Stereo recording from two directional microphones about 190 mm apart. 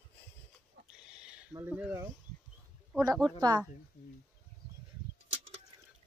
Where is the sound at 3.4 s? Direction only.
20° right (ahead or behind).